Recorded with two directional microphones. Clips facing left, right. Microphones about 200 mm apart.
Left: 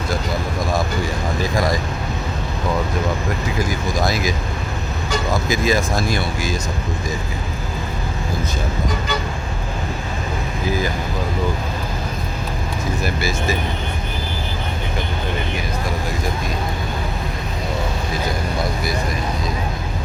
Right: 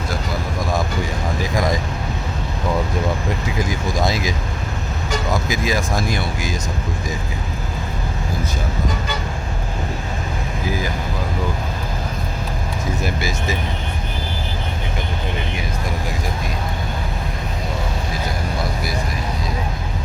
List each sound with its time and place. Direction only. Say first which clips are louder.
3.7 s speech: right 2 dB; 25° right (ahead or behind)
5.5 s speech: left 3 dB; 15° right (ahead or behind)
13.0 s speech: left 1 dB; 20° right (ahead or behind)